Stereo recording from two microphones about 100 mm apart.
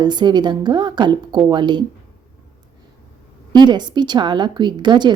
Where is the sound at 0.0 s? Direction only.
45° right (ahead or behind).